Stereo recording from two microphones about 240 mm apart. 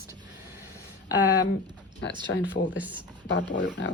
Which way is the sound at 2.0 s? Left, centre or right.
Left.